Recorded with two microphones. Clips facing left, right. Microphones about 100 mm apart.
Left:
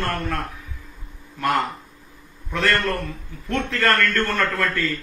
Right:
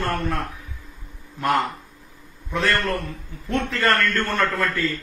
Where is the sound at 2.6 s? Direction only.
10° right (ahead or behind).